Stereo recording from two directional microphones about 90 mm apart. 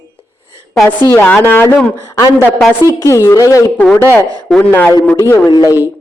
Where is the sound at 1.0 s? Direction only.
25° left (ahead or behind).